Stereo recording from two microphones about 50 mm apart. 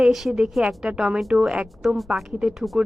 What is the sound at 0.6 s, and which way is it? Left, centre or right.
A woman's voice, centre.